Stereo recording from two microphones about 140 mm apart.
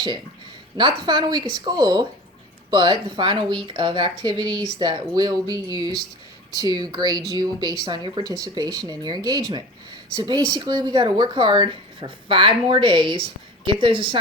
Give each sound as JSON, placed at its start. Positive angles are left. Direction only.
{"t": 0.8, "sound": "speech", "side_deg": -35}